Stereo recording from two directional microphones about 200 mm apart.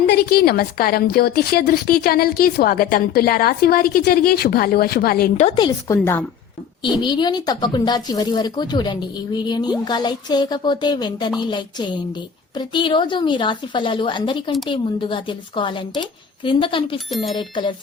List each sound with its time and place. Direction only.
0.1 s a woman's voice: 50° left (ahead or behind)
5.5 s speech: 25° left (ahead or behind)